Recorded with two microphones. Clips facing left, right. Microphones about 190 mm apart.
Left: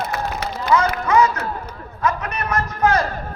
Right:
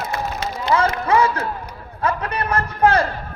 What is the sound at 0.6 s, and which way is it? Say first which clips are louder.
A man's voice: even; 30° right (ahead or behind).